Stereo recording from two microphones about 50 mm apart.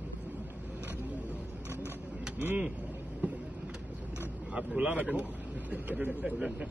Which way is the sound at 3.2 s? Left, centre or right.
Right.